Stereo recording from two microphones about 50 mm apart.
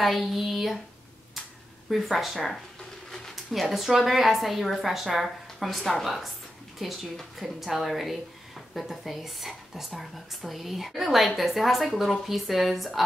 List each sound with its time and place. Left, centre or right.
0.0 s a woman's voice: centre
1.9 s a woman's voice: centre